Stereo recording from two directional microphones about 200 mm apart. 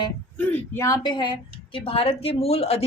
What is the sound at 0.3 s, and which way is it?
A woman's voice, 10° left (ahead or behind).